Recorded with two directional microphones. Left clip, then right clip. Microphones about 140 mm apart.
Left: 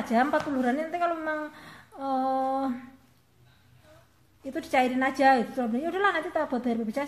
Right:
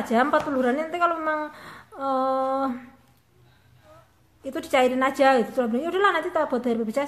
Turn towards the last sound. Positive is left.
turn(degrees=-25)  # may be behind; listen again after turning